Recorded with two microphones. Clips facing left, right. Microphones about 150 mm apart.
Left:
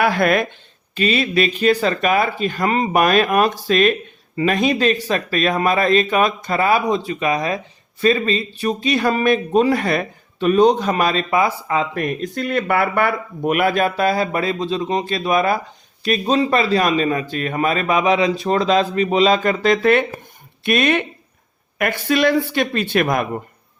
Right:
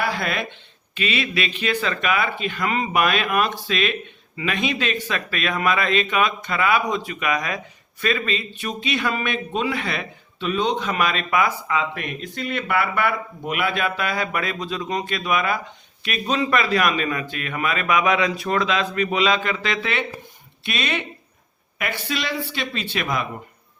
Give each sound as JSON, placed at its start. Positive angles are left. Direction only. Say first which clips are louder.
{"t": 0.0, "sound": "speech", "louder": "left 9 dB", "side_deg": 55}
{"t": 0.9, "sound": "a man's voice", "louder": "left 7 dB", "side_deg": 40}